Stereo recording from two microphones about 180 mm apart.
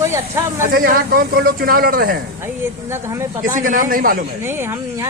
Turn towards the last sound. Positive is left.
turn(degrees=-50)  # may be behind; listen again after turning